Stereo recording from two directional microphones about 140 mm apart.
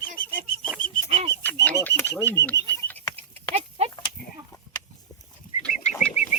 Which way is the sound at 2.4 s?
15° left (ahead or behind).